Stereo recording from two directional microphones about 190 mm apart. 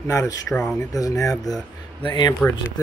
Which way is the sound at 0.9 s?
15° left (ahead or behind).